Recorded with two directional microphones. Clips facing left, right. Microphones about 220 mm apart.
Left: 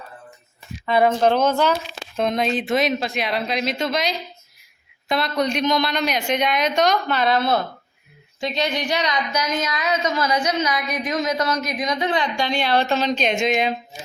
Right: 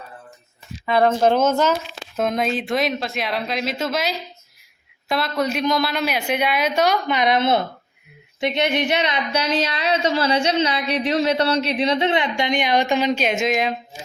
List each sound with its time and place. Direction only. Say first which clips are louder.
1.2 s a woman's voice: right 1 dB; 5° right (ahead or behind)